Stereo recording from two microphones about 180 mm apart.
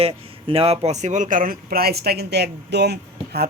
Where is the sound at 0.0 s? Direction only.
30° right (ahead or behind).